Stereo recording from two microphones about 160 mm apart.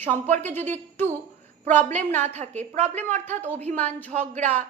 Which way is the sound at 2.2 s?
45° right (ahead or behind).